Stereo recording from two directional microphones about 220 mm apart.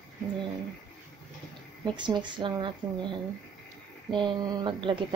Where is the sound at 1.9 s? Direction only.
20° right (ahead or behind).